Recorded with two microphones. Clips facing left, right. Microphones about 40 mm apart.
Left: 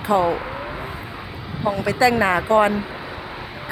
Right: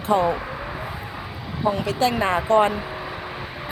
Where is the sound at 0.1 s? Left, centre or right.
Left.